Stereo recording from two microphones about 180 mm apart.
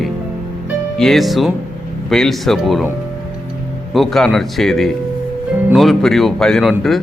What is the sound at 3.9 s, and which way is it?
A man's voice, centre (ahead or behind).